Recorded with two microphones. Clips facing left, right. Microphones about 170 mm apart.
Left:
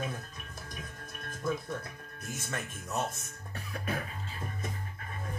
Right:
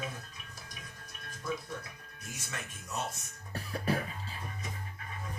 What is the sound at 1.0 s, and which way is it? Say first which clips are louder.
Music: left 6 dB; 50° left (ahead or behind).